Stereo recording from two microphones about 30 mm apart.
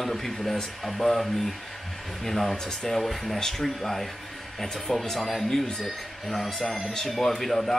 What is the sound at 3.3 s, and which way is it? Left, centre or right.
Speech, centre.